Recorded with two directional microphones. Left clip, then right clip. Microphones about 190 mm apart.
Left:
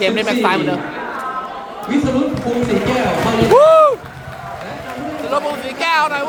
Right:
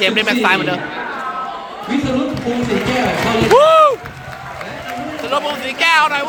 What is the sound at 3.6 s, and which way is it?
Speech, centre (ahead or behind).